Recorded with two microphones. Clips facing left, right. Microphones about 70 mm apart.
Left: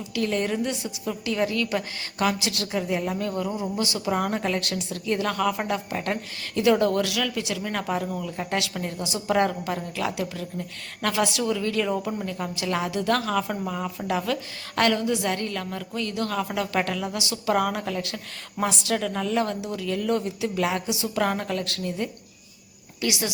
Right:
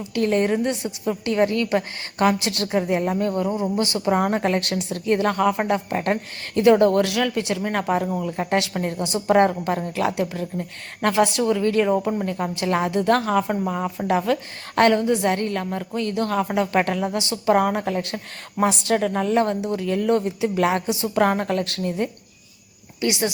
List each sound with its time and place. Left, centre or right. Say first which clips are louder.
0.1 s a woman's voice: right 6 dB; right
23.0 s speech: right 5 dB; right